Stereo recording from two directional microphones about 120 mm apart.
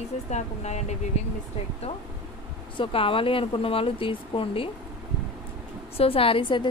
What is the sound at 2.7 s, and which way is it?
A woman's voice, 50° left (ahead or behind).